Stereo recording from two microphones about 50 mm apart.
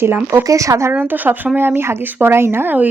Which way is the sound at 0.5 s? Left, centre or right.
Right.